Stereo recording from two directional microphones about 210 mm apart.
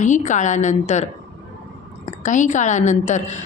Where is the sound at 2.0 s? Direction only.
35° left (ahead or behind).